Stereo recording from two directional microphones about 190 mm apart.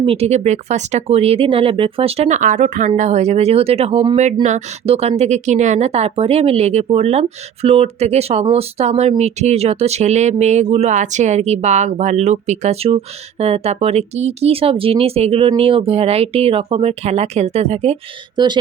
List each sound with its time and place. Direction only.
0.0 s a woman's voice: 30° right (ahead or behind)
18.3 s speech: 25° right (ahead or behind)